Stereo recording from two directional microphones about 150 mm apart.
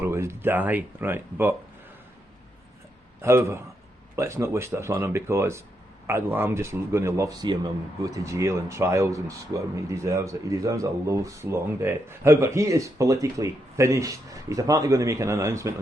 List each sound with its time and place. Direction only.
0.0 s speech: 15° right (ahead or behind)
3.2 s a man's voice: 15° right (ahead or behind)